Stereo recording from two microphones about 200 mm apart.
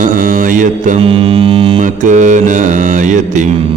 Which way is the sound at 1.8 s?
40° right (ahead or behind).